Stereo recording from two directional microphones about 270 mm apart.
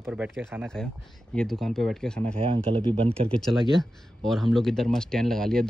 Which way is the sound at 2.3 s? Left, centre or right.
Centre.